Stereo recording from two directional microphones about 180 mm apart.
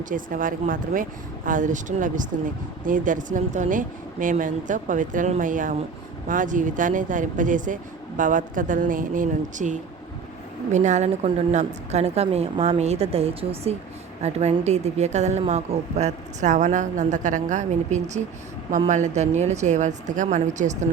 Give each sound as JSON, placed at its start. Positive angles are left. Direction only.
{"t": 0.0, "sound": "a woman's voice", "side_deg": -50}